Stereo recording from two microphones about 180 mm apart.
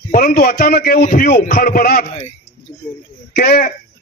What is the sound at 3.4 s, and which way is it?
Speech, 60° left (ahead or behind).